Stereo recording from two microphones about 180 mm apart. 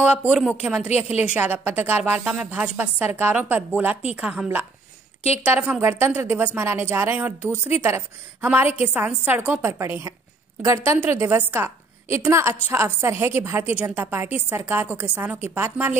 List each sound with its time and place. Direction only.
0.0 s a woman's voice: 10° right (ahead or behind)
0.8 s a woman's voice: 35° left (ahead or behind)
1.2 s a woman's voice: 10° right (ahead or behind)